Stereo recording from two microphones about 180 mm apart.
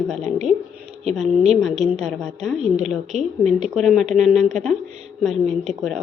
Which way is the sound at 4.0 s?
40° right (ahead or behind).